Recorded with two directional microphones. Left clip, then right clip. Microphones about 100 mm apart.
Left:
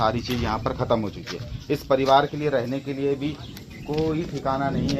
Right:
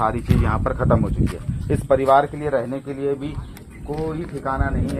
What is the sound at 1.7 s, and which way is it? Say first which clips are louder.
Speech: right 3 dB; 5° right (ahead or behind).